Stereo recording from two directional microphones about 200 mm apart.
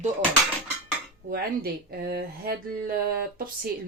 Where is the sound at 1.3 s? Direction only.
50° right (ahead or behind).